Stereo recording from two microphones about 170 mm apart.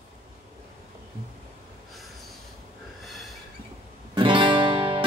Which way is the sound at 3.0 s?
Centre (ahead or behind).